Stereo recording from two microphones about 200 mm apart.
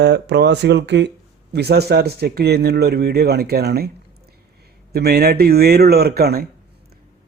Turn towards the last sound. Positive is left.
turn(degrees=-50)  # may be behind; listen again after turning